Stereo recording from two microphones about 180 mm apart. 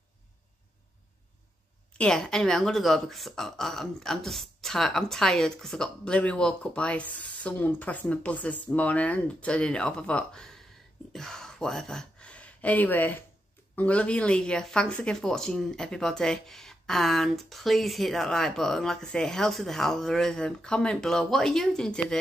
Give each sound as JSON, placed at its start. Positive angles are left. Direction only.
{"t": 2.0, "sound": "speech", "side_deg": 5}